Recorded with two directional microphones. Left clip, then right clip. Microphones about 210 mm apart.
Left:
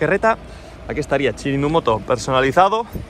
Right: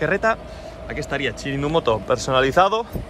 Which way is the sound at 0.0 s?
15° right (ahead or behind).